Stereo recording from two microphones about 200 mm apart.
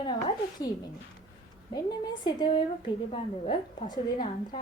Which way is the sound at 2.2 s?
20° left (ahead or behind).